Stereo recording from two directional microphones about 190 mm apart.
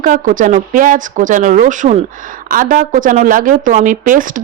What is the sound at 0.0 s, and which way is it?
Speech, 45° right (ahead or behind).